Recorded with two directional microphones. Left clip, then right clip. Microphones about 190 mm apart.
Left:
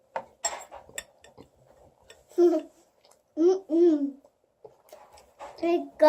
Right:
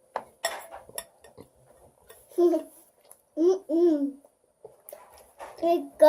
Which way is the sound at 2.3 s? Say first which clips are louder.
Left 1 dB; 25° left (ahead or behind).